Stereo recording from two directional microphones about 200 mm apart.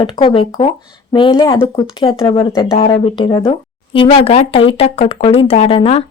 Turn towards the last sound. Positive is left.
turn(degrees=30)  # may be behind; listen again after turning